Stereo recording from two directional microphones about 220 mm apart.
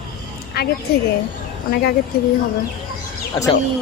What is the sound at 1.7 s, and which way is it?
Speech, 45° left (ahead or behind).